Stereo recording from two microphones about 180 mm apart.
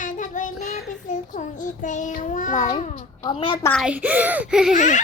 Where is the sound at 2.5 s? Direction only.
25° left (ahead or behind).